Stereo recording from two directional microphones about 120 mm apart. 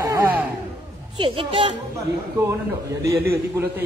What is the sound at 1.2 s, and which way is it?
Speech, 45° right (ahead or behind).